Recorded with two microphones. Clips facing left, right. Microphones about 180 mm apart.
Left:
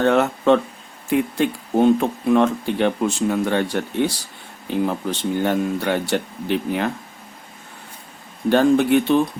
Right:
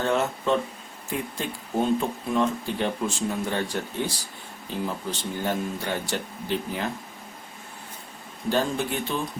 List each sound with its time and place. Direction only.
0.0 s speech: 70° left (ahead or behind)
5.4 s speech: 70° left (ahead or behind)
8.4 s speech: 65° left (ahead or behind)